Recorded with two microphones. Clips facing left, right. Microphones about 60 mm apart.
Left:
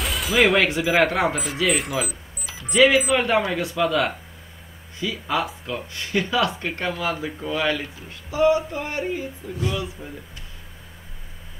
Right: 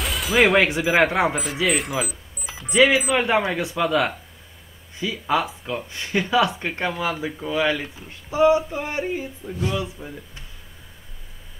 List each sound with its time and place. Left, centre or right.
0.0 s music: centre
0.8 s speech: centre
5.1 s speech: centre
8.1 s speech: right